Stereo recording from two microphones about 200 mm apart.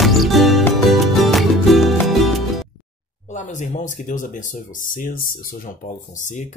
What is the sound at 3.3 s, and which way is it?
Speech, 35° left (ahead or behind).